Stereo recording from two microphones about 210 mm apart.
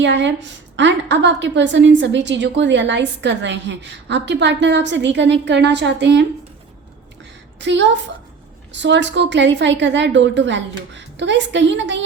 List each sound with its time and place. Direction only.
0.0 s a woman's voice: 60° right (ahead or behind)
7.6 s a woman's voice: 60° right (ahead or behind)